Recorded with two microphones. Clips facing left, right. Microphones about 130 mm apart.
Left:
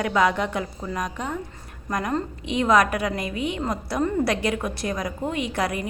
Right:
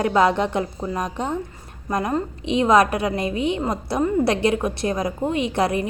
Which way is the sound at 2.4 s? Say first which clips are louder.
Right 3 dB; 25° right (ahead or behind).